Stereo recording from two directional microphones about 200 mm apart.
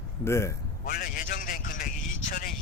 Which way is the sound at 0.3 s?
15° left (ahead or behind).